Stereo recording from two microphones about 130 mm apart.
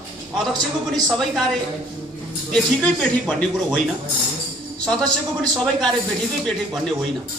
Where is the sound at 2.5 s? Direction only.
5° left (ahead or behind).